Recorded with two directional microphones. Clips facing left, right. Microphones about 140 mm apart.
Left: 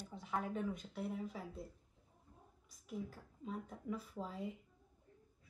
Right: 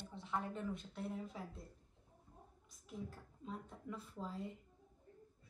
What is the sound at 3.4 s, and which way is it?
Speech, 5° left (ahead or behind).